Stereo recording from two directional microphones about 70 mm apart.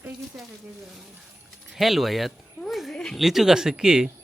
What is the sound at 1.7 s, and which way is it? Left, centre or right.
Speech, centre.